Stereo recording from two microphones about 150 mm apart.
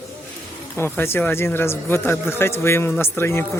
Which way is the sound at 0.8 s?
15° left (ahead or behind).